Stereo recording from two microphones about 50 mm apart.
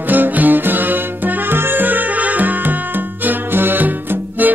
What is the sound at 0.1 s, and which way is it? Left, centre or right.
Music, right.